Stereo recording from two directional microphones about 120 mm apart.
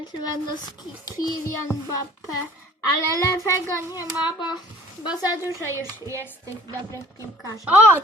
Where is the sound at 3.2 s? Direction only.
30° left (ahead or behind).